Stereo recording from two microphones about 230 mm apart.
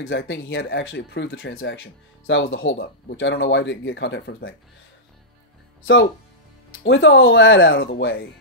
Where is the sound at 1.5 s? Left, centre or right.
Left.